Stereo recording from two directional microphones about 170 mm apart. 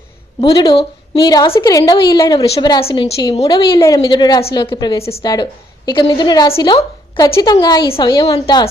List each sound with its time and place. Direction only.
0.4 s a woman's voice: 25° left (ahead or behind)